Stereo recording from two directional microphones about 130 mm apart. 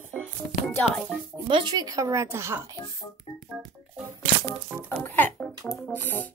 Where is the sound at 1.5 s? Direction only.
35° right (ahead or behind); by 2.6 s 20° right (ahead or behind).